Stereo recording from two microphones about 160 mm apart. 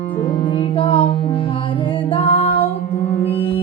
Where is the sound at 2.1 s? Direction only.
35° left (ahead or behind).